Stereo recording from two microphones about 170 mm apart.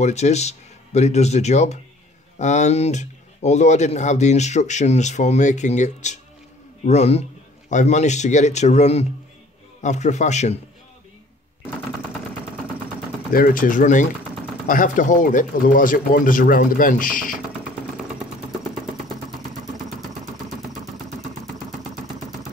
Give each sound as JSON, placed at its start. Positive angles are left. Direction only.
{"t": 0.0, "sound": "speech", "side_deg": 40}
{"t": 13.3, "sound": "speech", "side_deg": 55}